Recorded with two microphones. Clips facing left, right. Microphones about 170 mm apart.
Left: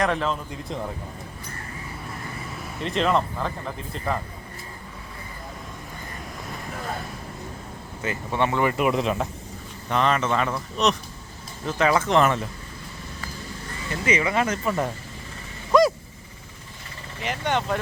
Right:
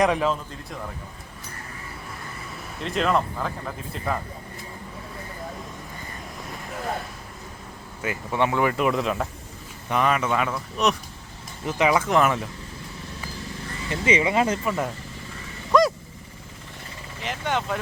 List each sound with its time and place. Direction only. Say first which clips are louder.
0.0 s speech: right 3 dB; 5° right (ahead or behind)
2.8 s speech: left 1 dB; centre (ahead or behind)
8.0 s speech: right 1 dB; 10° right (ahead or behind)
8.7 s speech: even; 10° left (ahead or behind)
9.9 s speech: even; 10° right (ahead or behind)
13.9 s speech: right 2 dB; 20° right (ahead or behind)
14.6 s speech: left 1 dB; 5° right (ahead or behind)
15.7 s vehicle: left 1 dB; centre (ahead or behind)
17.2 s speech: left 2 dB; centre (ahead or behind)